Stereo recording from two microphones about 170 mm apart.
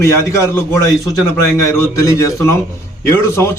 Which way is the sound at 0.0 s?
15° left (ahead or behind).